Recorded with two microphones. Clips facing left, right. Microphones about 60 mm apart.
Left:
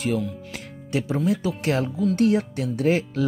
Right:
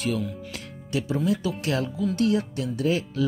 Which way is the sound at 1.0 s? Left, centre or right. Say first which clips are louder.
Left 1 dB; left.